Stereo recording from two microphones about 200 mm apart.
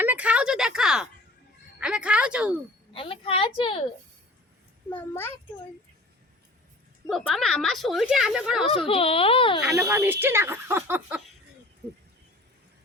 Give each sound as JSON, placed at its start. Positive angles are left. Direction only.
{"t": 0.0, "sound": "a woman's voice", "side_deg": -10}
{"t": 2.9, "sound": "a woman's voice", "side_deg": 25}
{"t": 4.9, "sound": "a child's voice", "side_deg": 10}
{"t": 7.1, "sound": "a woman's voice", "side_deg": 0}
{"t": 8.6, "sound": "a woman's voice", "side_deg": 30}
{"t": 9.7, "sound": "speech", "side_deg": -10}